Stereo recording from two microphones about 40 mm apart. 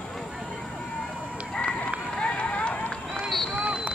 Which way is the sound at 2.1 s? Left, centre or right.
Left.